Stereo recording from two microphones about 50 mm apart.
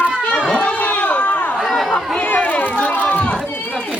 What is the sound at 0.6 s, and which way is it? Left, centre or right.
Run, left.